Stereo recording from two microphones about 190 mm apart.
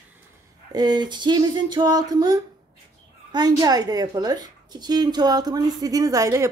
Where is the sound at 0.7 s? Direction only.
20° right (ahead or behind).